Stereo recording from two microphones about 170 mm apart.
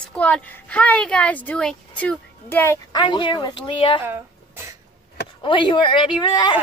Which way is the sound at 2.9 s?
30° left (ahead or behind).